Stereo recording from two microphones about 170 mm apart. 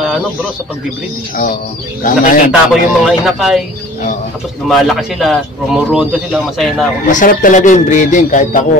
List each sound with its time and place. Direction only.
2.0 s speech: 50° left (ahead or behind)
2.7 s speech: centre (ahead or behind)
4.6 s speech: centre (ahead or behind)
7.1 s speech: 50° left (ahead or behind)